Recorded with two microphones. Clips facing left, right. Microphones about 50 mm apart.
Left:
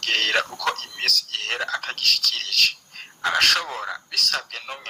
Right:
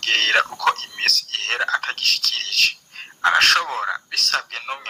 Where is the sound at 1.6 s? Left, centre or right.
Right.